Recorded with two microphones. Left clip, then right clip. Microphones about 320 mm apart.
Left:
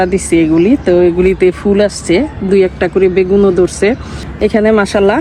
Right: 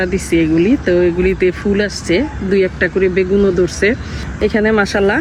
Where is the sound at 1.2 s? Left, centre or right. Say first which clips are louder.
Left 4 dB; centre.